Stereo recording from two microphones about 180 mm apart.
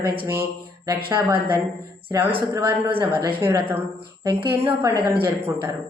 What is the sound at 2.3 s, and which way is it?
Speech, 30° right (ahead or behind).